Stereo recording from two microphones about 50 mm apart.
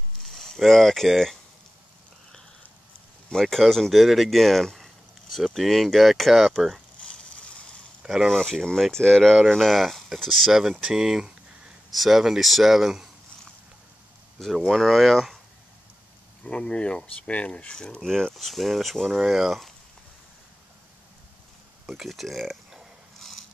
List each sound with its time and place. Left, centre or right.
0.2 s speech: centre
3.3 s speech: centre
8.0 s a sound: centre
8.4 s speech: centre
14.4 s speech: centre
16.4 s speech: centre
21.8 s speech: centre